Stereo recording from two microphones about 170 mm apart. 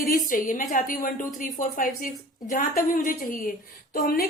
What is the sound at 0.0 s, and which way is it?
A woman's voice, 50° left (ahead or behind).